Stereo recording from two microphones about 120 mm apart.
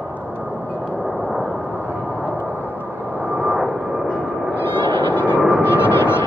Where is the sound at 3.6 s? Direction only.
5° right (ahead or behind).